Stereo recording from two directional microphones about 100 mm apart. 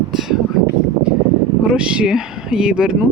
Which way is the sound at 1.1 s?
10° right (ahead or behind).